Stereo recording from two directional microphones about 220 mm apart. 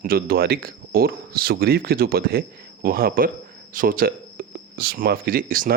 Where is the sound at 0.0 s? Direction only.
40° right (ahead or behind).